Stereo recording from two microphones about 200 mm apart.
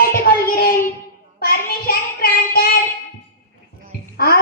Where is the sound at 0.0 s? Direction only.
50° left (ahead or behind).